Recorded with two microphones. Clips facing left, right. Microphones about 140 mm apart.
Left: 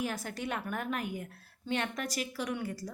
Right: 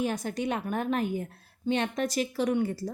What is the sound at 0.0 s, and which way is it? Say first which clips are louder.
Speech: right 6 dB; 20° right (ahead or behind).